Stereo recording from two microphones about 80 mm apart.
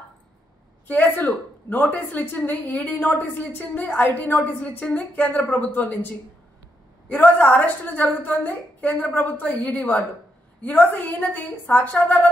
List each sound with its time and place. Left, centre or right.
0.8 s a woman's voice: left
7.1 s a woman's voice: left